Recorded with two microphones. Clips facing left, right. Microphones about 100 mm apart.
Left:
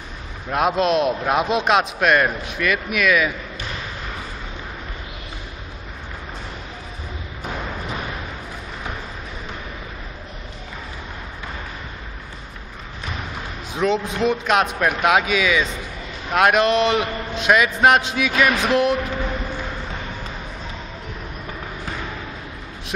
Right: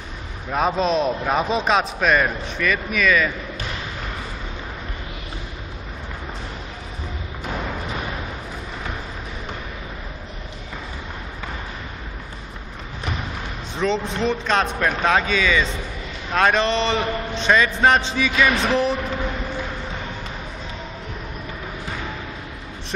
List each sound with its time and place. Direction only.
0.5 s a man's voice: 5° left (ahead or behind)
13.7 s a man's voice: 5° left (ahead or behind)